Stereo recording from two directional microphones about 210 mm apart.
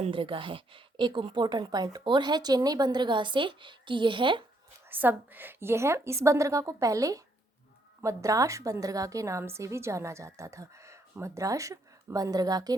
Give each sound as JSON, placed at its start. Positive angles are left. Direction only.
{"t": 0.0, "sound": "a woman's voice", "side_deg": -25}
{"t": 4.9, "sound": "a woman's voice", "side_deg": -10}